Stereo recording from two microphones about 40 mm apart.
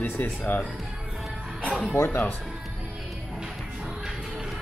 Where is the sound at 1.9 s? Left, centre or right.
Left.